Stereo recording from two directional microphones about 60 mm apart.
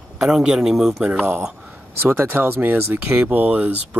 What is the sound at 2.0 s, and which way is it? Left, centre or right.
Speech, right.